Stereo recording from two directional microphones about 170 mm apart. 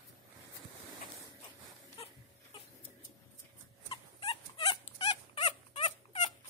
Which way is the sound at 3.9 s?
30° left (ahead or behind).